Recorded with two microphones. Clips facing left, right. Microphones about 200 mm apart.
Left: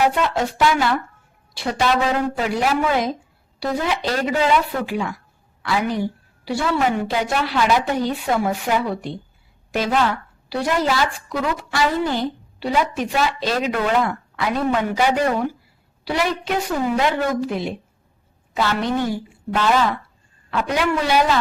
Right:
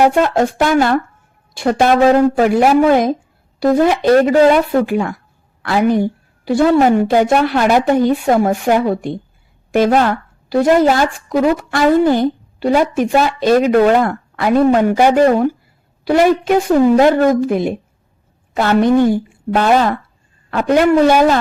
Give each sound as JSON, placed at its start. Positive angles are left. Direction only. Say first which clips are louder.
{"t": 0.0, "sound": "speech", "louder": "right 7 dB", "side_deg": -50}